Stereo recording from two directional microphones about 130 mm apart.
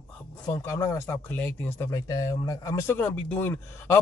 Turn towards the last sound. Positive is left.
turn(degrees=15)  # may be behind; listen again after turning